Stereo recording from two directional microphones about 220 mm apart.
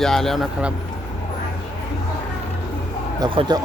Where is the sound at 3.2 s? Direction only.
20° right (ahead or behind).